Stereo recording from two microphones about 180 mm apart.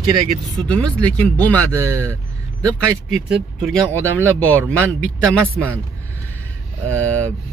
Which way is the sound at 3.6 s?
5° left (ahead or behind).